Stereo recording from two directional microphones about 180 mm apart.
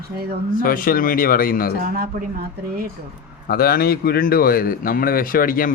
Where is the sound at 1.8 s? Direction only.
50° right (ahead or behind).